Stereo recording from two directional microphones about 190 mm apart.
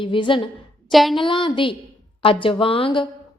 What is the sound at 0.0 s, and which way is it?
Speech, 25° left (ahead or behind).